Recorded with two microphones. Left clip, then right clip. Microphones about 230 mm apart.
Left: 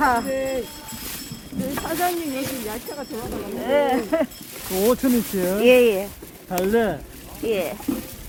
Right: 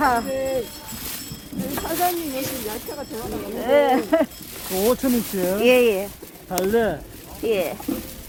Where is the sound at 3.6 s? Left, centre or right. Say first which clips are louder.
Right 3 dB; right.